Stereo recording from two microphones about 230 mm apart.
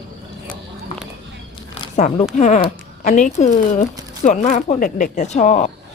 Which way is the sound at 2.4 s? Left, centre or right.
Left.